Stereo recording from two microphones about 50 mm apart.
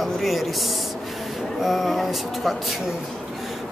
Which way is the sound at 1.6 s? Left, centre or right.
Centre.